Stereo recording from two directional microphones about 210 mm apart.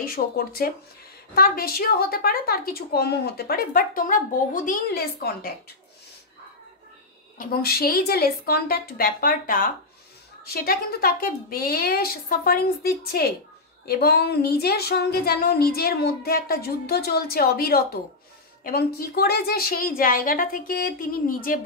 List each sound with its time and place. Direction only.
0.0 s a woman's voice: 45° left (ahead or behind)
7.3 s a woman's voice: 45° left (ahead or behind)